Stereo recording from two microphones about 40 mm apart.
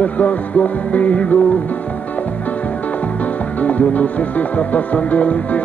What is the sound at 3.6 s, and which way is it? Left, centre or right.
Music, left.